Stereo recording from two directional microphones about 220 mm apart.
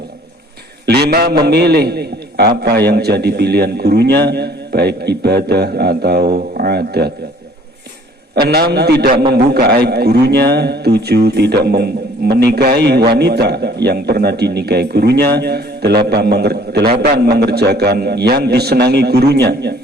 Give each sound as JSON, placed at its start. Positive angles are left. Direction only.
{"t": 0.9, "sound": "a sound", "side_deg": -45}
{"t": 1.5, "sound": "a man's voice", "side_deg": -50}
{"t": 8.4, "sound": "a man's voice", "side_deg": -45}